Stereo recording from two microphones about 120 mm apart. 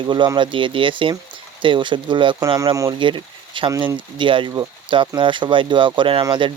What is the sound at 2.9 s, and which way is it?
Speech, 45° right (ahead or behind).